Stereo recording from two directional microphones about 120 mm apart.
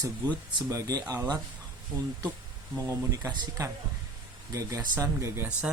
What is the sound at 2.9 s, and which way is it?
Speech, 30° right (ahead or behind).